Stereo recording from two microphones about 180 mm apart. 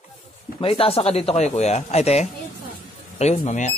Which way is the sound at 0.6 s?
30° left (ahead or behind).